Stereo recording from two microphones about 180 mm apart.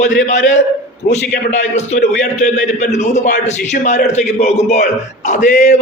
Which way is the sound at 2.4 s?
40° left (ahead or behind).